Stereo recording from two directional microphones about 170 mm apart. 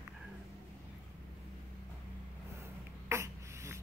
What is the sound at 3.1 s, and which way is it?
Beatboxing, 15° right (ahead or behind).